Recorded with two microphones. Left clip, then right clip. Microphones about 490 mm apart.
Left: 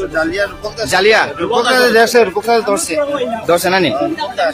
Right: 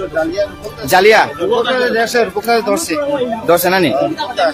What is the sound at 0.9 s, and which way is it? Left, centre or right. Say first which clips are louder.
Speech: right 2 dB; right.